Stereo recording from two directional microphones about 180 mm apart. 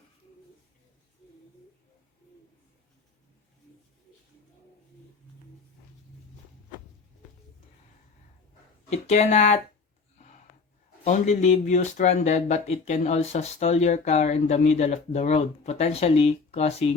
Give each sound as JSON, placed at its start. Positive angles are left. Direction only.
{"t": 8.9, "sound": "speech", "side_deg": 40}
{"t": 11.0, "sound": "speech", "side_deg": 40}